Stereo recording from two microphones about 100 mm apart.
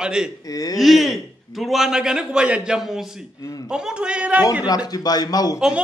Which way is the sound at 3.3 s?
35° left (ahead or behind).